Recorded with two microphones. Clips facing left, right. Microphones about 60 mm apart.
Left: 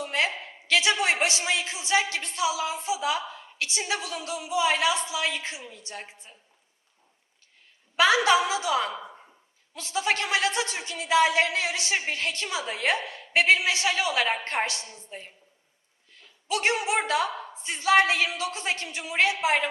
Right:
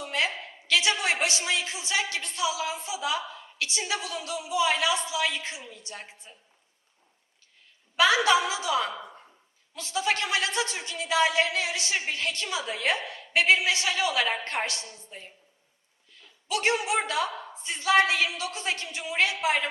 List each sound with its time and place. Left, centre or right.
0.0 s a sound: left
0.7 s a woman's voice: left
8.2 s a woman's voice: left
16.5 s a woman's voice: left